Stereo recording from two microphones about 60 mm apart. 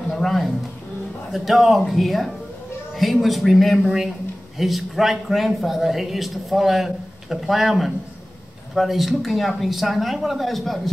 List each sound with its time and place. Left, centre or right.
1.3 s a man's voice: centre